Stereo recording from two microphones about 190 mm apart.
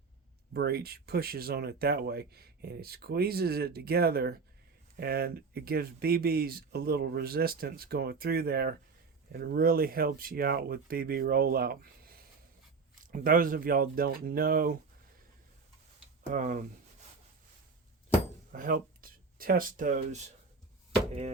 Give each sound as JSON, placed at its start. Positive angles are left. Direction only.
{"t": 0.5, "sound": "speech", "side_deg": -55}
{"t": 16.3, "sound": "speech", "side_deg": -40}
{"t": 18.5, "sound": "speech", "side_deg": -45}